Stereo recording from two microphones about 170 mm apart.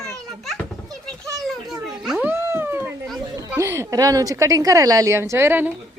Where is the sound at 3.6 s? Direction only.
15° right (ahead or behind).